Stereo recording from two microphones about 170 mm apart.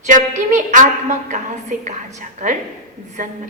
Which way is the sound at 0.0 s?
45° right (ahead or behind).